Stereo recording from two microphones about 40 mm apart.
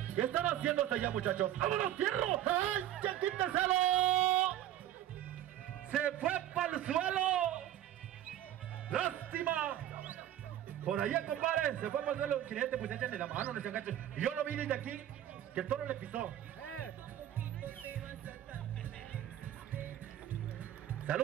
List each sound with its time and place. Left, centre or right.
0.1 s a man's voice: right
2.5 s a man's voice: right
4.1 s music: right
6.2 s a man's voice: right
9.3 s music: right
11.0 s a man's voice: right
11.7 s a man's voice: right
17.4 s music: right